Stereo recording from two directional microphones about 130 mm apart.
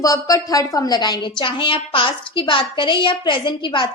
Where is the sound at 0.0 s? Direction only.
25° left (ahead or behind).